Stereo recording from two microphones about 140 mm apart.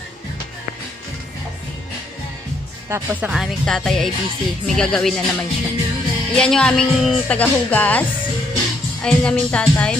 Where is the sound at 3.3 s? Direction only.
Centre (ahead or behind).